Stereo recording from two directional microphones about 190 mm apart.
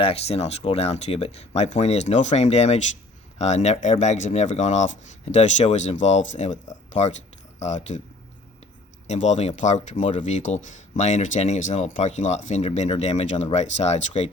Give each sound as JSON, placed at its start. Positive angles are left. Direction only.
{"t": 0.0, "sound": "speech", "side_deg": 30}
{"t": 9.0, "sound": "speech", "side_deg": 40}